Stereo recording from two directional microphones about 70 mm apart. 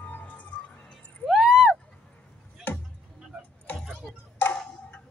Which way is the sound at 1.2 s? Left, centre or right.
Centre.